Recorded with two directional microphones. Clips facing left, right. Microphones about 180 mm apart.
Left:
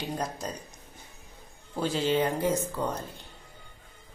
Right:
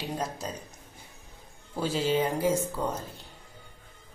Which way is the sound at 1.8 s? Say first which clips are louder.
Even; 5° right (ahead or behind).